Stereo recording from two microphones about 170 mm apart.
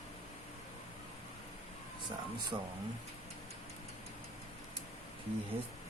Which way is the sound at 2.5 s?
20° right (ahead or behind).